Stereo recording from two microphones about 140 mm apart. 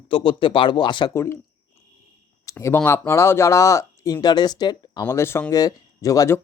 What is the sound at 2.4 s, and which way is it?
Speech, 20° left (ahead or behind).